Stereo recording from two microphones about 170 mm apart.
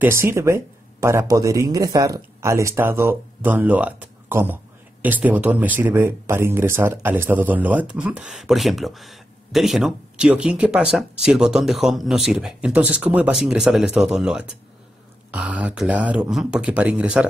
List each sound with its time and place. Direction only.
0.0 s a man's voice: 15° right (ahead or behind)